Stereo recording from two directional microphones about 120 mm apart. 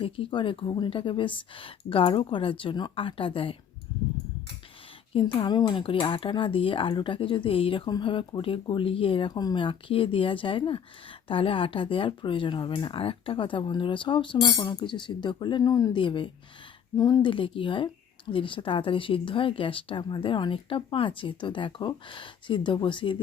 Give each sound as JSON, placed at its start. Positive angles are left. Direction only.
{"t": 0.0, "sound": "speech", "side_deg": 45}
{"t": 5.2, "sound": "speech", "side_deg": 40}
{"t": 9.3, "sound": "speech", "side_deg": 35}
{"t": 16.0, "sound": "speech", "side_deg": 45}
{"t": 17.0, "sound": "speech", "side_deg": 30}
{"t": 17.2, "sound": "speech", "side_deg": 45}